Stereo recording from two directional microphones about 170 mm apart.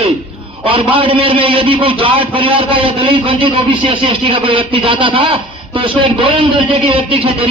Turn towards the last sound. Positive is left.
turn(degrees=-30)  # may be behind; listen again after turning